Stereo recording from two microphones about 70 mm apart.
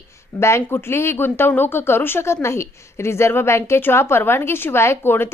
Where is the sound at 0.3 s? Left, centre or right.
Left.